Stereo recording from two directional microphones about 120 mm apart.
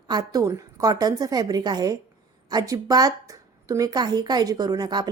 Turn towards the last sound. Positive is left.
turn(degrees=-35)  # may be behind; listen again after turning